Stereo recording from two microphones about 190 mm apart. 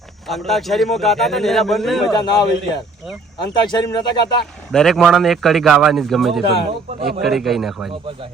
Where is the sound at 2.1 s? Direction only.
25° left (ahead or behind).